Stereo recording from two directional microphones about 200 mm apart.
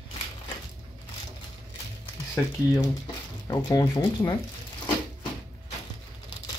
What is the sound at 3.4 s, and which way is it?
Speech, 20° left (ahead or behind).